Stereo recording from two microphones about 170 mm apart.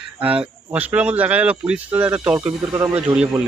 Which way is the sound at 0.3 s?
5° right (ahead or behind).